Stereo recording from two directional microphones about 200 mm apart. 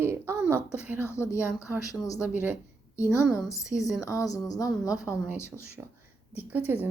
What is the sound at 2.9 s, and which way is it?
Speech, 15° left (ahead or behind).